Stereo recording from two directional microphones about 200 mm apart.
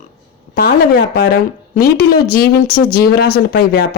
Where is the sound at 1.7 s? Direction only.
45° left (ahead or behind).